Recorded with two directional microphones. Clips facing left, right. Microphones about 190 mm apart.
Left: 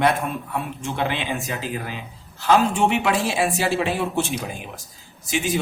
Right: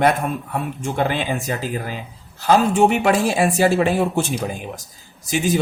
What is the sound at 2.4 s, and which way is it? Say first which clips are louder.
A man's voice: right 3 dB; 40° right (ahead or behind).